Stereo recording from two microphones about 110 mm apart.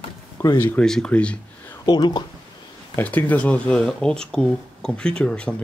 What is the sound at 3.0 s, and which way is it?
Speech, 15° left (ahead or behind).